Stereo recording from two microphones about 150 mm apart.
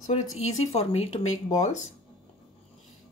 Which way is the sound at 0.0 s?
50° left (ahead or behind).